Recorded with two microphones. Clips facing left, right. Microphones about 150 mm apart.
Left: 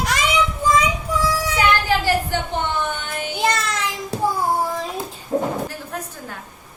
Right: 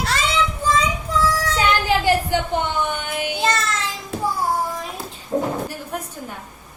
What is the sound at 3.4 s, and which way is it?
Child singing, 15° left (ahead or behind).